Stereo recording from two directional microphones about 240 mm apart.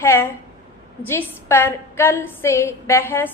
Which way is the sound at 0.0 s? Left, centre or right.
Centre.